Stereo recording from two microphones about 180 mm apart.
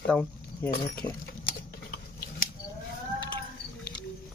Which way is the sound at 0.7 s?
55° left (ahead or behind).